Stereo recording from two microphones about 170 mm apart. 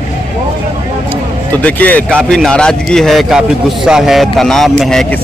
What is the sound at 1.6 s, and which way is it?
Speech, 10° left (ahead or behind).